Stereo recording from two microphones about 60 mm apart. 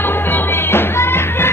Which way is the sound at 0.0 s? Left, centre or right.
Left.